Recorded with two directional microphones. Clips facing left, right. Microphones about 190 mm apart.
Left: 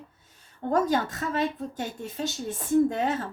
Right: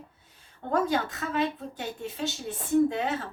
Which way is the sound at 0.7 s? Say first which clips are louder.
Left 2 dB; 45° left (ahead or behind).